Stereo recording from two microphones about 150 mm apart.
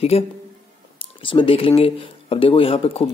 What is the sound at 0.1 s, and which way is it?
A man's voice, 40° left (ahead or behind).